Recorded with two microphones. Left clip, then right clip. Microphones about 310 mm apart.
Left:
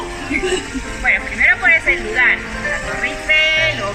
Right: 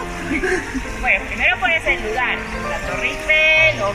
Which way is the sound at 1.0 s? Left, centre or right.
Centre.